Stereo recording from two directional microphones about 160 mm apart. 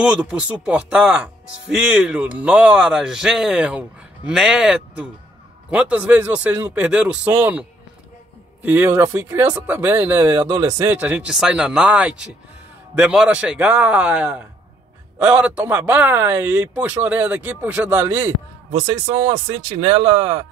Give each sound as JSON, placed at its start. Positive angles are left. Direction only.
{"t": 0.0, "sound": "speech", "side_deg": -5}
{"t": 8.6, "sound": "a man's voice", "side_deg": -15}